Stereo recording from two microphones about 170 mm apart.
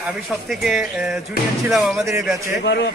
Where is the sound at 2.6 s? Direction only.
90° left.